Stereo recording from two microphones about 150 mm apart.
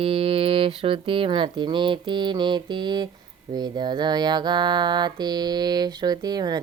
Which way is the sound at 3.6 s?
30° right (ahead or behind).